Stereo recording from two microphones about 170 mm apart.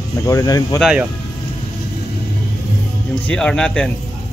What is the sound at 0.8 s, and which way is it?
Speech, 5° right (ahead or behind).